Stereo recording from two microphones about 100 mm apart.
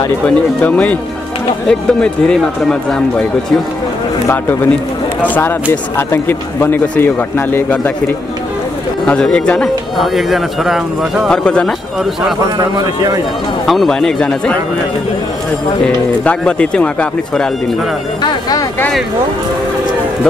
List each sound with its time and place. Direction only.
0.6 s speech: 15° left (ahead or behind)
4.3 s a man's voice: 20° left (ahead or behind)
9.0 s speech: 10° left (ahead or behind)
11.3 s speech: 5° left (ahead or behind)
12.5 s a man's voice: 40° right (ahead or behind)
13.7 s speech: 5° left (ahead or behind)
16.3 s speech: 10° left (ahead or behind)